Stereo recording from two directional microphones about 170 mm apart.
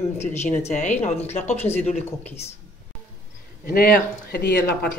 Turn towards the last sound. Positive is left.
turn(degrees=65)  # may be behind; listen again after turning